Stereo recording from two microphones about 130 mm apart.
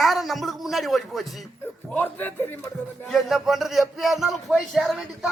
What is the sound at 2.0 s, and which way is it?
Speech, 15° left (ahead or behind).